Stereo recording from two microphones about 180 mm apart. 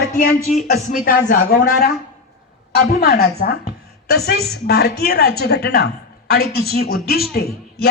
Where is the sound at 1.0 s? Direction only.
55° left (ahead or behind).